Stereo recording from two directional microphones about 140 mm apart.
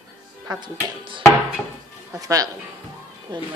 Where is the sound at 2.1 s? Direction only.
25° right (ahead or behind).